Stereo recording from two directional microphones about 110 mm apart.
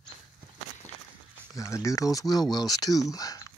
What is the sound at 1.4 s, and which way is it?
Speech, 30° left (ahead or behind).